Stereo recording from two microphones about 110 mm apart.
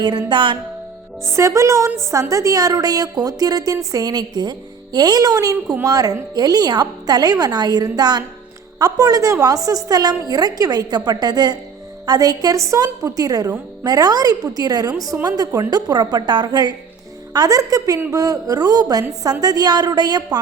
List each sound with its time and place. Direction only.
0.0 s music: 40° right (ahead or behind)
1.3 s a woman's voice: 30° right (ahead or behind)